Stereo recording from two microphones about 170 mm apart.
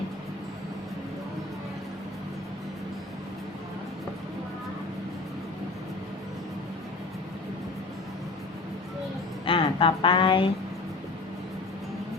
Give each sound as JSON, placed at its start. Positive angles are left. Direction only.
{"t": 9.5, "sound": "a woman's voice", "side_deg": 30}